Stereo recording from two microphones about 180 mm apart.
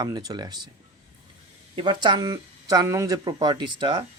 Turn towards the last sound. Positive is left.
turn(degrees=-25)  # may be behind; listen again after turning